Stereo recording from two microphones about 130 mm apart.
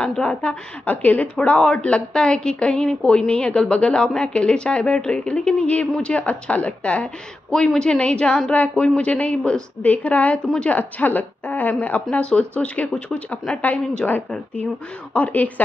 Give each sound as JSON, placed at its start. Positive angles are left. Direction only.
{"t": 0.0, "sound": "a woman's voice", "side_deg": 5}